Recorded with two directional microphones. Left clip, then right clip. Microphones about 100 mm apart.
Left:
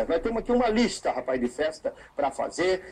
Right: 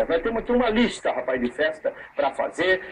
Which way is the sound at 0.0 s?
30° left (ahead or behind).